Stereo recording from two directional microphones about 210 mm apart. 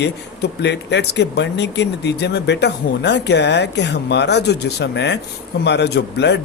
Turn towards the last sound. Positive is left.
turn(degrees=55)  # may be behind; listen again after turning